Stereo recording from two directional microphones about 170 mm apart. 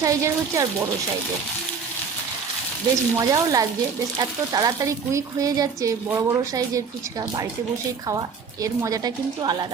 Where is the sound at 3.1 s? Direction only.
20° right (ahead or behind).